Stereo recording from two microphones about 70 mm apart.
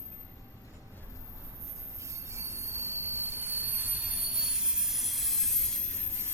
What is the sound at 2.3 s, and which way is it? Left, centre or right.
Train wheels squealing, right.